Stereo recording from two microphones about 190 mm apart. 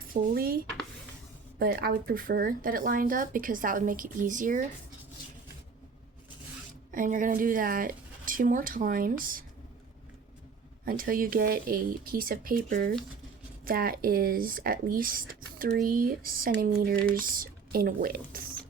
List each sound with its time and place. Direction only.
0.1 s speech: 50° right (ahead or behind)
6.9 s speech: 45° right (ahead or behind)
10.8 s speech: 50° right (ahead or behind)